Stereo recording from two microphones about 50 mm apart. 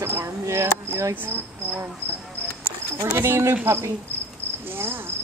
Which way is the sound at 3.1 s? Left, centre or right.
Right.